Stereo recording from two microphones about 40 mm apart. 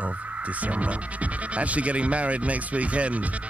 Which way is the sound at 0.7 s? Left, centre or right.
Right.